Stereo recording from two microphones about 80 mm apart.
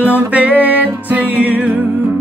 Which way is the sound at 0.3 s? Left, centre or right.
Centre.